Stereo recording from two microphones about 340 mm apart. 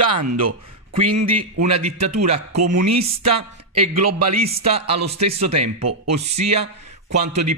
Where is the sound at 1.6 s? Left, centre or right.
Centre.